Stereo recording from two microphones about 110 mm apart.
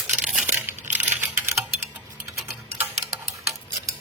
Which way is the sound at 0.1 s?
10° right (ahead or behind).